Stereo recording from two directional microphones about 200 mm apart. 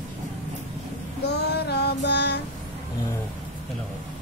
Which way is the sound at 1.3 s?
55° left (ahead or behind).